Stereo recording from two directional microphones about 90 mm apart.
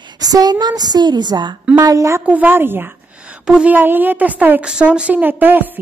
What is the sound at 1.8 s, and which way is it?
Speech, 35° right (ahead or behind).